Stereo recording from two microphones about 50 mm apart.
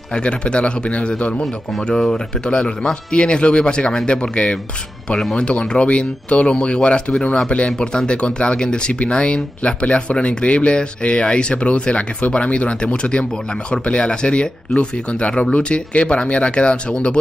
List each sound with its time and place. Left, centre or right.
0.1 s speech: left
1.9 s speech: centre
5.4 s speech: left